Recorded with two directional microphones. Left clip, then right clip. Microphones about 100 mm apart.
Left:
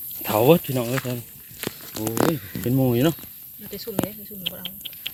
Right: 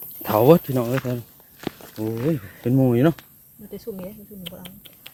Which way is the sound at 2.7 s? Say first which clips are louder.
Right 2 dB; 20° right (ahead or behind).